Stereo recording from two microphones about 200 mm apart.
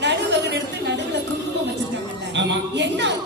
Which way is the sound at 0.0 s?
60° right (ahead or behind).